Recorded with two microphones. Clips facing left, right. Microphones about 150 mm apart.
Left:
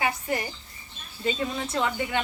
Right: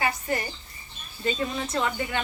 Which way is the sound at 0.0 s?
15° left (ahead or behind).